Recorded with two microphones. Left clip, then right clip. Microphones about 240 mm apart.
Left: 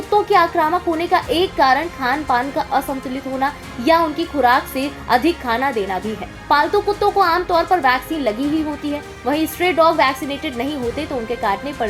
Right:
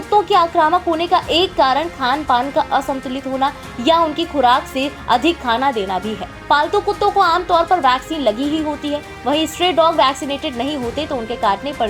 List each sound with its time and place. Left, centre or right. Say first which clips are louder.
0.1 s a woman's voice: right 1 dB; right